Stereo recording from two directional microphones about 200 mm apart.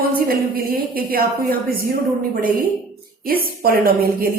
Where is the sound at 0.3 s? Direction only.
50° right (ahead or behind).